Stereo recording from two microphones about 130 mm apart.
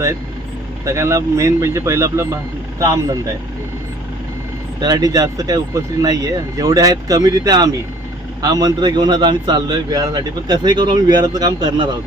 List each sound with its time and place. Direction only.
0.9 s speech: 20° right (ahead or behind)
4.8 s a man's voice: 30° right (ahead or behind)